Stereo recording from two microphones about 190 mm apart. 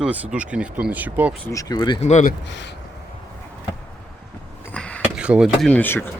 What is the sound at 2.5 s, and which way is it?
Speech, 70° left (ahead or behind).